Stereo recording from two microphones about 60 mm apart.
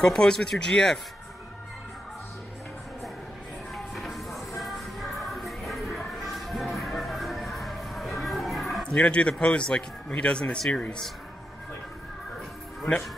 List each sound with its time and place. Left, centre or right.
0.0 s speech: centre
3.7 s music: centre
8.8 s speech: centre